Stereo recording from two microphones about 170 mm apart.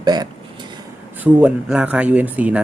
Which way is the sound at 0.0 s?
25° right (ahead or behind).